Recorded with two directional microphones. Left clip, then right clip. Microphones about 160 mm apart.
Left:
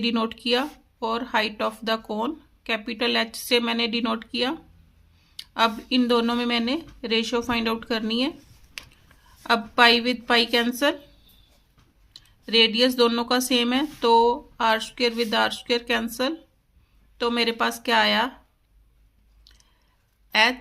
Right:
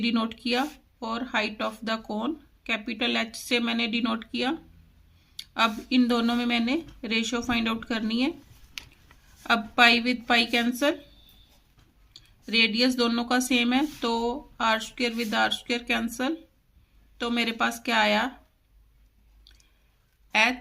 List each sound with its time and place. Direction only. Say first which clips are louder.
0.0 s speech: left 3 dB; 15° left (ahead or behind)
5.5 s speech: left 2 dB; 15° left (ahead or behind)
8.8 s a sound: left 1 dB; 15° right (ahead or behind)
9.4 s speech: left 2 dB; 15° left (ahead or behind)
12.1 s speech: left 4 dB; 15° left (ahead or behind)
20.3 s speech: left 3 dB; 15° left (ahead or behind)